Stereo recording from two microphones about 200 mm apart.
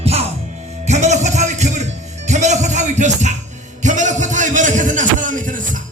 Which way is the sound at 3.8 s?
40° right (ahead or behind).